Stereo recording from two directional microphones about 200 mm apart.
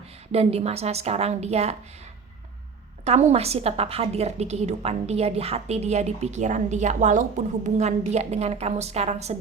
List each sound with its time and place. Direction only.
0.3 s a woman's voice: 30° right (ahead or behind)
3.0 s a woman's voice: 35° right (ahead or behind)